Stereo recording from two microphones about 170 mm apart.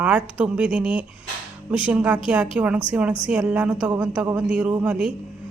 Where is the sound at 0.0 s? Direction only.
5° right (ahead or behind).